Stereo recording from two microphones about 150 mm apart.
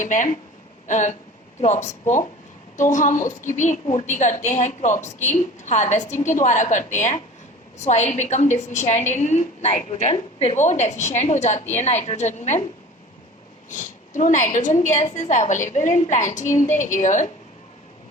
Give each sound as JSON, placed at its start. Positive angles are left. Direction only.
{"t": 0.0, "sound": "a woman's voice", "side_deg": 55}
{"t": 0.9, "sound": "a sound", "side_deg": 55}
{"t": 1.6, "sound": "a woman's voice", "side_deg": 50}
{"t": 13.7, "sound": "a woman's voice", "side_deg": 55}